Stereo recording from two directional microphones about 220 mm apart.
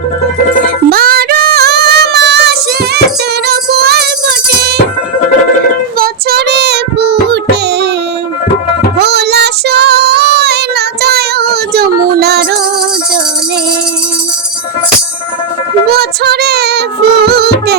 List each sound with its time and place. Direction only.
0.9 s female singing: 45° right (ahead or behind)
3.4 s music: 45° right (ahead or behind)
6.0 s music: 45° right (ahead or behind)
9.0 s child singing: 50° right (ahead or behind)
12.1 s music: 45° right (ahead or behind)
15.9 s music: 45° right (ahead or behind)